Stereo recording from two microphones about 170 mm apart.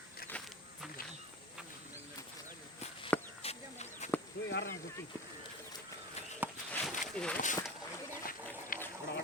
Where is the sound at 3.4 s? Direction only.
40° left (ahead or behind).